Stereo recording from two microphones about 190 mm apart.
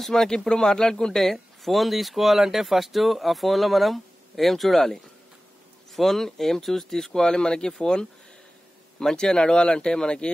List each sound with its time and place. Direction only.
0.0 s speech: centre (ahead or behind)